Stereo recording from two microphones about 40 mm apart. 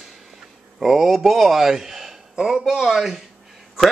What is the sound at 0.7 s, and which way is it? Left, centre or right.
A man's voice, centre.